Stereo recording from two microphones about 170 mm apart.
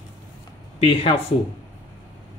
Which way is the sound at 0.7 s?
35° left (ahead or behind).